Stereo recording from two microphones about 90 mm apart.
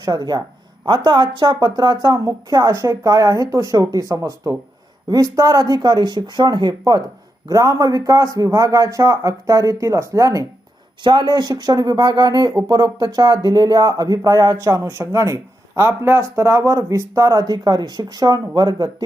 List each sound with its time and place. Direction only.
0.0 s speech: 50° right (ahead or behind)
7.4 s speech: 40° right (ahead or behind)
11.0 s speech: 55° right (ahead or behind)